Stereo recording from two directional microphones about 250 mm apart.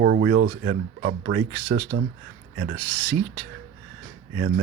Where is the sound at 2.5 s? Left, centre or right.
Right.